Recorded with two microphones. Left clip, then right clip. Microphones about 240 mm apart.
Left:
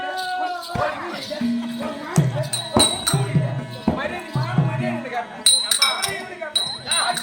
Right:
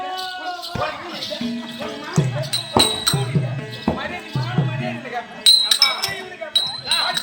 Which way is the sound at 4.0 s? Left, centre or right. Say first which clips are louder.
Left 1 dB; centre.